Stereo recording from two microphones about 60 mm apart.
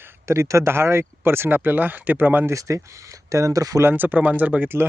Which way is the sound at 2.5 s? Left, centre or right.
Right.